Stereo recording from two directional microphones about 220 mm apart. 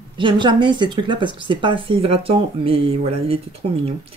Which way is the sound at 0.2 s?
20° right (ahead or behind).